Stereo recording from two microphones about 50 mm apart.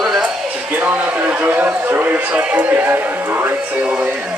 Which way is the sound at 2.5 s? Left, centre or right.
Right.